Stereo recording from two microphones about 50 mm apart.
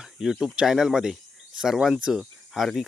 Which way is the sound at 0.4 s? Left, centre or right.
Centre.